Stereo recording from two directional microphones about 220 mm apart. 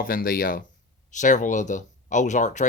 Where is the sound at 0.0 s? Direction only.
40° left (ahead or behind).